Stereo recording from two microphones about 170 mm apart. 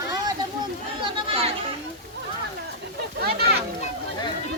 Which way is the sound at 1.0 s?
30° right (ahead or behind).